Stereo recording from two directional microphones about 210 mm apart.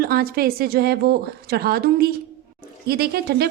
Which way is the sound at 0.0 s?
45° right (ahead or behind).